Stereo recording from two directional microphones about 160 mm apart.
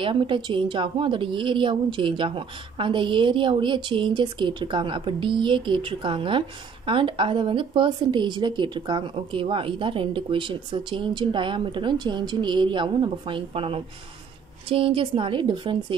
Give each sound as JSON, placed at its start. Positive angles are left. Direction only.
{"t": 0.0, "sound": "a woman's voice", "side_deg": -30}